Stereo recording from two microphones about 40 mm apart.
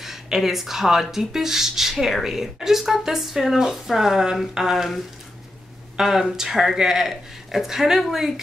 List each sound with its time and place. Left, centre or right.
0.0 s speech: centre